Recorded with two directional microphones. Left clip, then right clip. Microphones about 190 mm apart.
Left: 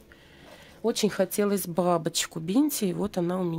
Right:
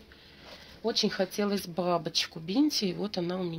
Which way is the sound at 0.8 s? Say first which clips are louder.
Left 3 dB; 70° left (ahead or behind).